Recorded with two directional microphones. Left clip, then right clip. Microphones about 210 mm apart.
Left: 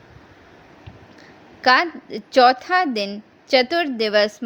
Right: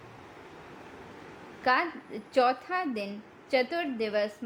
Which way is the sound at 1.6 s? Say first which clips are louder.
Left 10 dB; 25° left (ahead or behind).